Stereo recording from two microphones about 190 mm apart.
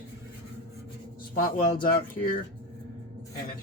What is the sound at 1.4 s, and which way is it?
Speech, 45° left (ahead or behind).